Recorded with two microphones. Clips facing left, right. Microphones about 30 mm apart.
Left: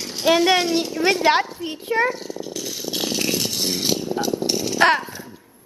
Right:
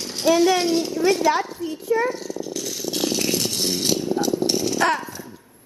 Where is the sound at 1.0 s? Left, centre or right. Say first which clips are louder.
Left 3 dB; left.